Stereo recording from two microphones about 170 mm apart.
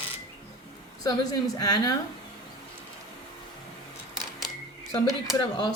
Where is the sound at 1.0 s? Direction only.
20° left (ahead or behind).